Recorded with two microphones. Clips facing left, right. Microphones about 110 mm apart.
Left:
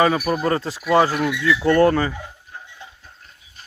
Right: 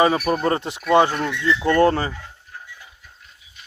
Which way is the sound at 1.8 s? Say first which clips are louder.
Right 1 dB; 25° right (ahead or behind).